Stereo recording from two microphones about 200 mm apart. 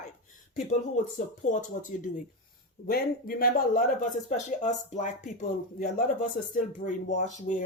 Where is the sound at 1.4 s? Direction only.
35° left (ahead or behind).